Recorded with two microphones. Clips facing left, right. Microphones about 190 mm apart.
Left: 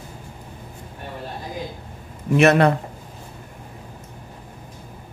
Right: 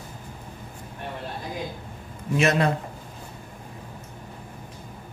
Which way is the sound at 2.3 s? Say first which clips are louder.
Left 7 dB; 65° left (ahead or behind).